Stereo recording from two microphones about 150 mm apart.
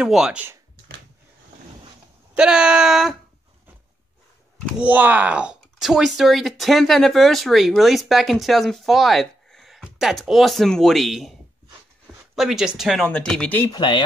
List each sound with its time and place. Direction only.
0.0 s speech: 5° right (ahead or behind)
2.3 s speech: 5° right (ahead or behind)
4.7 s speech: 10° right (ahead or behind)
12.4 s speech: 5° right (ahead or behind)
13.7 s speech: 30° left (ahead or behind)